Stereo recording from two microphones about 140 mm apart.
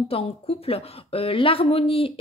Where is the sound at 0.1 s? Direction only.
45° left (ahead or behind).